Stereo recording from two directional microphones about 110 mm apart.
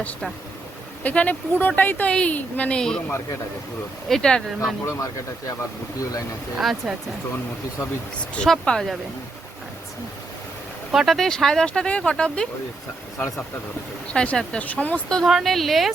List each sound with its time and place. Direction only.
1.0 s a woman's voice: 15° left (ahead or behind)
4.1 s a woman's voice: 5° left (ahead or behind)
6.0 s speech: 30° left (ahead or behind)
6.6 s speech: centre (ahead or behind)
8.4 s speech: 5° left (ahead or behind)
10.9 s a woman's voice: centre (ahead or behind)
14.1 s a woman's voice: 10° left (ahead or behind)
15.2 s speech: centre (ahead or behind)